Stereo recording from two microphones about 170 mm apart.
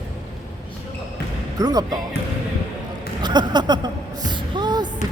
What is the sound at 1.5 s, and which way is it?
Speech, 20° right (ahead or behind).